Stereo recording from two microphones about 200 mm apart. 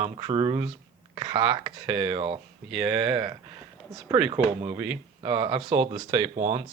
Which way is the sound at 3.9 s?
5° right (ahead or behind).